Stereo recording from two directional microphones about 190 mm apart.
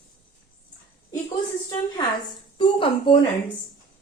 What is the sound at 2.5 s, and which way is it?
Speech, 25° left (ahead or behind).